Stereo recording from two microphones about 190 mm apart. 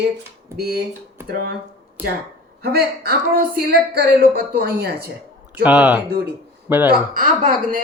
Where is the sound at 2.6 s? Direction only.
50° right (ahead or behind).